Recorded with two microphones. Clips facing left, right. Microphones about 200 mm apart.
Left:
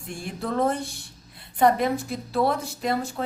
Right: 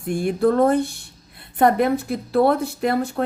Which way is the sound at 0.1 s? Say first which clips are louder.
Right 11 dB; 60° right (ahead or behind).